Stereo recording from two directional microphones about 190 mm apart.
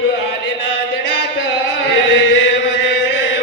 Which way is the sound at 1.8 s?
65° left (ahead or behind).